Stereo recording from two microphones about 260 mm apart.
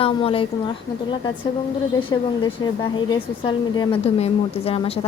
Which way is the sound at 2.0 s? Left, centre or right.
Centre.